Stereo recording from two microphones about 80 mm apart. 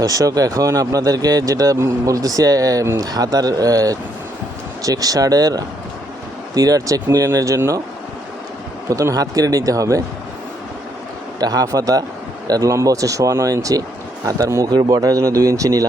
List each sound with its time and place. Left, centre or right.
0.0 s speech: right
8.9 s speech: right
11.3 s speech: right